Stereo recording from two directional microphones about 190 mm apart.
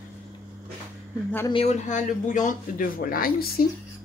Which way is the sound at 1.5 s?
35° left (ahead or behind).